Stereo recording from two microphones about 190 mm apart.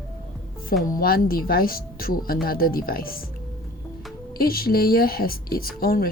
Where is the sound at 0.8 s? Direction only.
50° left (ahead or behind).